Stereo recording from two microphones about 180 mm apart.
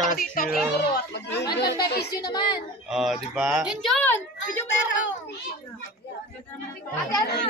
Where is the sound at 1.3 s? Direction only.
20° left (ahead or behind).